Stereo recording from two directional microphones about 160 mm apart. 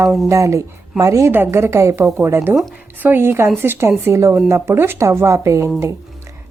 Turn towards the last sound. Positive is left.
turn(degrees=-20)  # may be behind; listen again after turning